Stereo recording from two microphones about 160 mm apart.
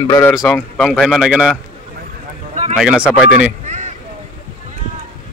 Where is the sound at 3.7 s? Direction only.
50° right (ahead or behind).